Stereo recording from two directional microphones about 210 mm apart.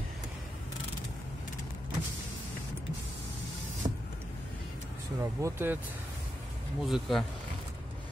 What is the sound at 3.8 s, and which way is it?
Vehicle, 20° right (ahead or behind).